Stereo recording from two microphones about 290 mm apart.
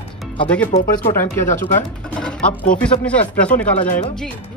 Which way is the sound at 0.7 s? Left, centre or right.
Left.